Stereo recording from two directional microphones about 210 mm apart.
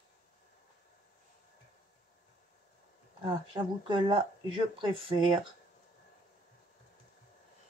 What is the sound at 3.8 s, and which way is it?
Speech, 20° right (ahead or behind).